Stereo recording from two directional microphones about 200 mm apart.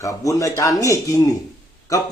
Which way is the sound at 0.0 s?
15° left (ahead or behind).